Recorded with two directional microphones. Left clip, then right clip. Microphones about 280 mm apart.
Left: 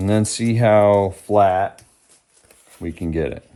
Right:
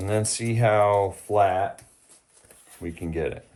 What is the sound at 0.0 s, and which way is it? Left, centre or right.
Speech, left.